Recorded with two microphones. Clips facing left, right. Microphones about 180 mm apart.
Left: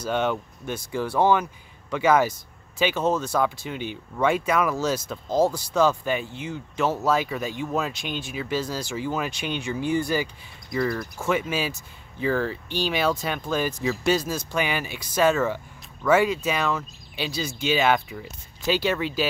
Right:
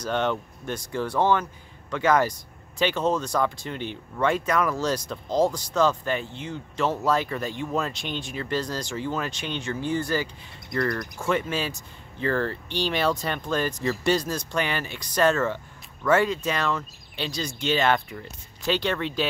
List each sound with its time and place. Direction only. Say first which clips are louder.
0.0 s speech: left 1 dB; 10° left (ahead or behind)